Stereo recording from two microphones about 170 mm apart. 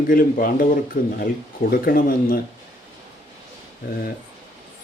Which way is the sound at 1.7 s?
60° left (ahead or behind).